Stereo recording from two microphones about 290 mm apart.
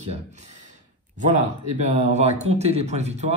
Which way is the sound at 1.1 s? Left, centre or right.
Right.